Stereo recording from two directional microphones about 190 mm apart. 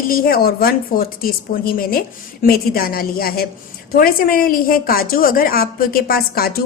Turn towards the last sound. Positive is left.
turn(degrees=55)  # may be behind; listen again after turning